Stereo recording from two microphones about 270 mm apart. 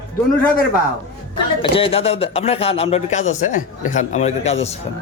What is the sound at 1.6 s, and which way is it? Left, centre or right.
Speech, centre.